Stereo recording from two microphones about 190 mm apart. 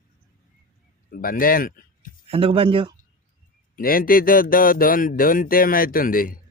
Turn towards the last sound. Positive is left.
turn(degrees=50)  # may be behind; listen again after turning